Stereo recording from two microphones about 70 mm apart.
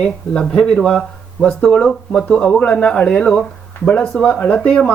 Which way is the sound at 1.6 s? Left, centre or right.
Centre.